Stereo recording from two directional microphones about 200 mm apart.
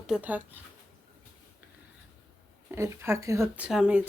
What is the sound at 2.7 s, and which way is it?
Speech, 15° right (ahead or behind).